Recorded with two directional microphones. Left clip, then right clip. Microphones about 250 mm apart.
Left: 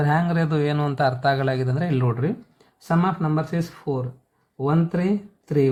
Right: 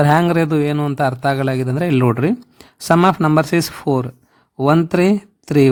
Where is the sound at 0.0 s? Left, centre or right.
Right.